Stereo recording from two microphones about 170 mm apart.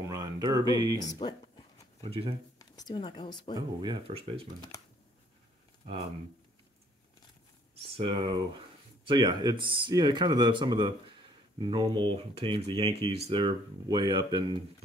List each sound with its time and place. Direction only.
0.0 s speech: 20° right (ahead or behind)
0.9 s speech: 25° left (ahead or behind)
2.0 s speech: 35° right (ahead or behind)
2.6 s speech: 25° left (ahead or behind)
3.5 s speech: 25° right (ahead or behind)
7.7 s speech: 30° right (ahead or behind)